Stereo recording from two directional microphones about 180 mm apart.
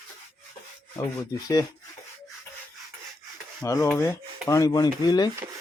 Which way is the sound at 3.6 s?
15° left (ahead or behind).